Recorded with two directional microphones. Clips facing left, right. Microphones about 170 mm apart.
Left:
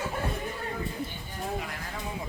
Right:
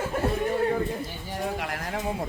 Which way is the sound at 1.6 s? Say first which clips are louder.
Right 6 dB; 65° right (ahead or behind).